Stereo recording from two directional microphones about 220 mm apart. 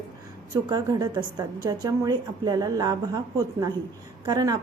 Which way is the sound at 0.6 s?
20° right (ahead or behind).